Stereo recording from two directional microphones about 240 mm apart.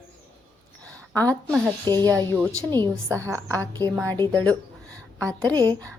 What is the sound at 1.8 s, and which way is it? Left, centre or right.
A woman's voice, centre.